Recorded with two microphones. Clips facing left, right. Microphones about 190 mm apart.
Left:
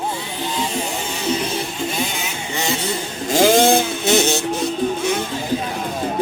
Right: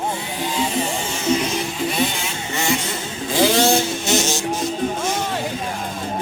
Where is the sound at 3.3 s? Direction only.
50° left (ahead or behind).